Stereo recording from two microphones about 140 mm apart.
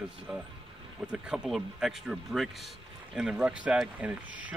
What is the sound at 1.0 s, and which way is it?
Speech, 5° right (ahead or behind).